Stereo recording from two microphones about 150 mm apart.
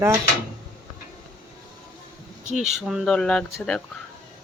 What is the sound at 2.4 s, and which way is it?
Speech, 5° right (ahead or behind).